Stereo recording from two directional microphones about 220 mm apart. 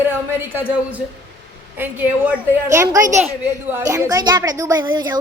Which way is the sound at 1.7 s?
10° right (ahead or behind).